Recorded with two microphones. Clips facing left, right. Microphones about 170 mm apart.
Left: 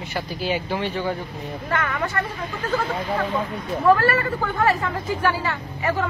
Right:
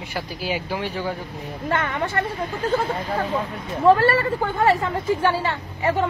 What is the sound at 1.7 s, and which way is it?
Speech, 25° right (ahead or behind).